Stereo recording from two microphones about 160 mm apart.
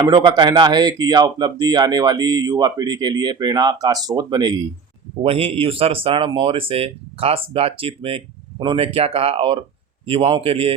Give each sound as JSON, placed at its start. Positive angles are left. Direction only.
{"t": 0.0, "sound": "speech", "side_deg": -25}
{"t": 5.2, "sound": "speech", "side_deg": -35}